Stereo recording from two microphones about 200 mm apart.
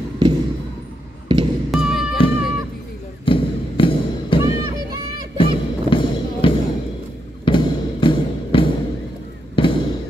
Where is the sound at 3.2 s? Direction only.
25° left (ahead or behind).